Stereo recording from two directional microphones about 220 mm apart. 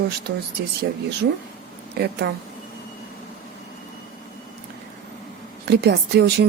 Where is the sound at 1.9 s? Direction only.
45° right (ahead or behind).